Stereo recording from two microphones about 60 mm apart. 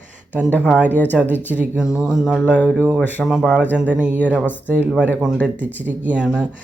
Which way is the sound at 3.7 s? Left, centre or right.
Right.